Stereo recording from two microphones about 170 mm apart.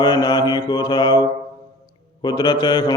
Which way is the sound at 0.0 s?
25° left (ahead or behind).